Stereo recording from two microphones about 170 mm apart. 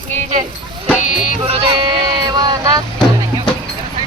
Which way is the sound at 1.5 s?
35° right (ahead or behind).